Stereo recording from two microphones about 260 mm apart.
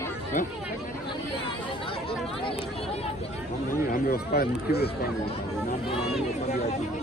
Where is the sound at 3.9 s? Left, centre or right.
Left.